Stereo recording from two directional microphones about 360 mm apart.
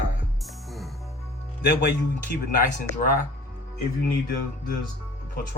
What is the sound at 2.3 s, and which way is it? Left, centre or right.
Speech, left.